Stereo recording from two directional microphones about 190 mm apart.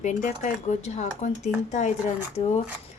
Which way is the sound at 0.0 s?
40° left (ahead or behind).